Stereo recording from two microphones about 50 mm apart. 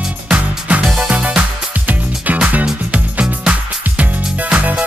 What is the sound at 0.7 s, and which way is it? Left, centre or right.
Music, right.